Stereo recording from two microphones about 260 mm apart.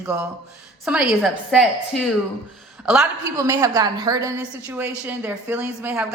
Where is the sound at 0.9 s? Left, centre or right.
Centre.